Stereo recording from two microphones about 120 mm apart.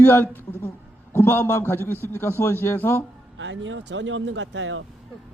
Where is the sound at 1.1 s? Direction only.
20° left (ahead or behind).